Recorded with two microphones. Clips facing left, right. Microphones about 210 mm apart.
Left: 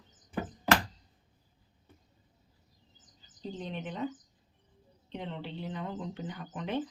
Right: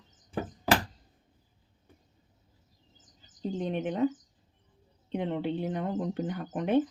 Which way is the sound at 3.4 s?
50° right (ahead or behind).